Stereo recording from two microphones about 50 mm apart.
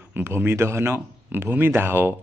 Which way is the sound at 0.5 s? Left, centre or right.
Right.